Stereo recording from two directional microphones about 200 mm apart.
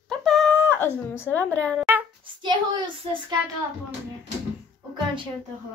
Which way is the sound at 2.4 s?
20° right (ahead or behind).